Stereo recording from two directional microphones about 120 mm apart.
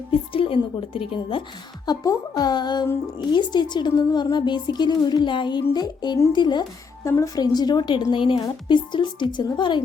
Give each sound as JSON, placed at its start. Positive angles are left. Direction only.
{"t": 0.1, "sound": "a woman's voice", "side_deg": 50}
{"t": 1.9, "sound": "speech", "side_deg": 35}
{"t": 7.0, "sound": "speech", "side_deg": 25}